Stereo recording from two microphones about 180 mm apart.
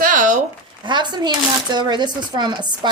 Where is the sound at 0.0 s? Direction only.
45° right (ahead or behind).